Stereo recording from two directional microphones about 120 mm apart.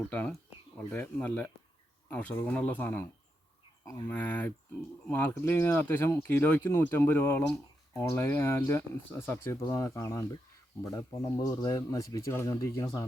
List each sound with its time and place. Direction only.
0.1 s speech: 10° left (ahead or behind)
4.1 s speech: 15° left (ahead or behind)